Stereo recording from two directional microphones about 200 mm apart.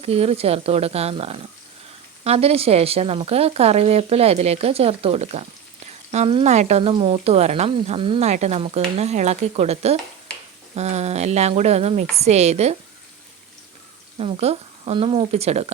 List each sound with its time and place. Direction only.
0.0 s speech: 30° right (ahead or behind)
14.2 s speech: 30° right (ahead or behind)